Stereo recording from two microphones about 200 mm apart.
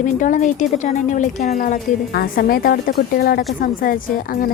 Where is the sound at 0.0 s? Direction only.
40° left (ahead or behind).